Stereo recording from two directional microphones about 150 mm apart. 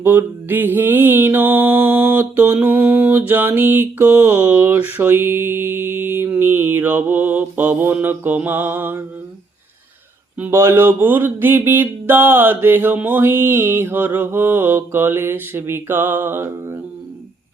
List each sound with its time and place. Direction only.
0.0 s mantra: 15° right (ahead or behind)
10.3 s mantra: 15° right (ahead or behind)